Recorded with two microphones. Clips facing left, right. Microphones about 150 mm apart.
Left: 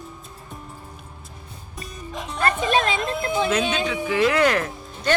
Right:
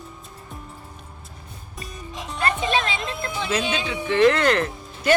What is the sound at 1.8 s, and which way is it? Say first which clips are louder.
Music: even; centre (ahead or behind).